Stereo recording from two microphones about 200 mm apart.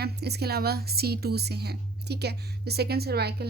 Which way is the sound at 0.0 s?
55° right (ahead or behind).